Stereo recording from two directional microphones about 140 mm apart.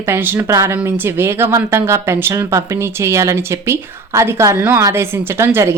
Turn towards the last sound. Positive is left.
turn(degrees=-20)  # may be behind; listen again after turning